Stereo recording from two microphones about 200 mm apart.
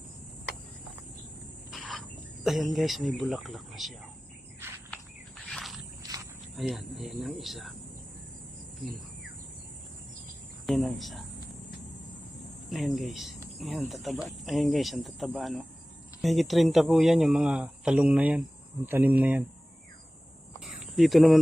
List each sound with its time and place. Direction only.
1.7 s speech: centre (ahead or behind)
5.5 s a sound: centre (ahead or behind)
6.0 s a sound: 15° right (ahead or behind)
6.6 s speech: centre (ahead or behind)
10.7 s speech: centre (ahead or behind)
12.7 s speech: centre (ahead or behind)
20.7 s cricket: centre (ahead or behind)